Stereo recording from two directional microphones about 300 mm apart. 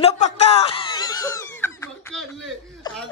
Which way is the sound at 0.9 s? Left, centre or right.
Centre.